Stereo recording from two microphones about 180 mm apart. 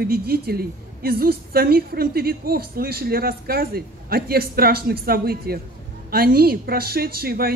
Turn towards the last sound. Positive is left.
turn(degrees=-55)  # may be behind; listen again after turning